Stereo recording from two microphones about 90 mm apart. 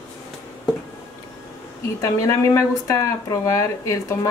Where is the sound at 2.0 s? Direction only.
40° left (ahead or behind).